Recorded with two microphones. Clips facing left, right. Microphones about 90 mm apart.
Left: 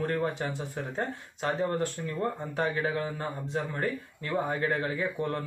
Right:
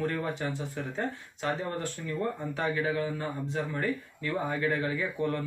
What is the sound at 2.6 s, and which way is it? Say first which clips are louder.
Speech: left 1 dB; 40° left (ahead or behind).